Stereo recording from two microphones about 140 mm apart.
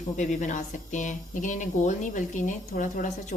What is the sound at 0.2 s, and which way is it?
Speech, 60° left (ahead or behind).